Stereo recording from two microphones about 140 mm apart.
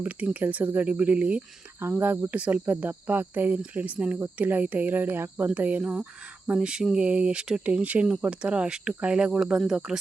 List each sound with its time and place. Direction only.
0.0 s speech: 10° right (ahead or behind)